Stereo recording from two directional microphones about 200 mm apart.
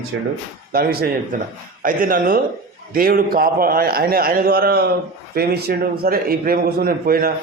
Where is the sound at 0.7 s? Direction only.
50° right (ahead or behind).